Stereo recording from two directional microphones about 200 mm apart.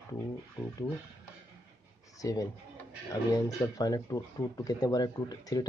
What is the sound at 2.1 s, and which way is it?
Speech, 15° left (ahead or behind).